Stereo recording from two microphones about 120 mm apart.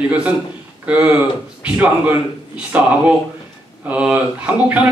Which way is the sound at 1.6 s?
15° right (ahead or behind).